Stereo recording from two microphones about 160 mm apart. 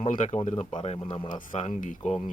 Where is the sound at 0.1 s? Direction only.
50° left (ahead or behind).